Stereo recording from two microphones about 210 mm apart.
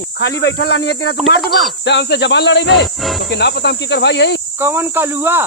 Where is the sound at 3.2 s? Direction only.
50° left (ahead or behind).